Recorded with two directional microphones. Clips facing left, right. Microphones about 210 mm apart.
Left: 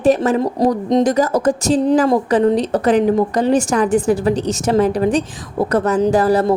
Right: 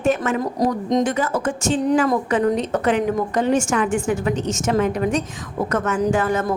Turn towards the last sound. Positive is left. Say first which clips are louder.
# left 6 dB
turn(degrees=35)  # may be behind; listen again after turning